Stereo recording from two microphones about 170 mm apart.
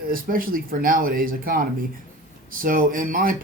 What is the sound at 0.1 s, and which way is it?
Speech, 55° right (ahead or behind).